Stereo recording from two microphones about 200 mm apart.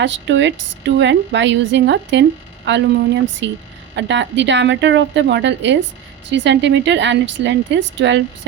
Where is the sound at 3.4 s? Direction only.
65° right (ahead or behind).